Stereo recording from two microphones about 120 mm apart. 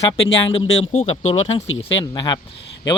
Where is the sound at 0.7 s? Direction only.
65° left (ahead or behind).